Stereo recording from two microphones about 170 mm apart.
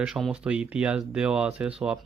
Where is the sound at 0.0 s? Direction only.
5° right (ahead or behind).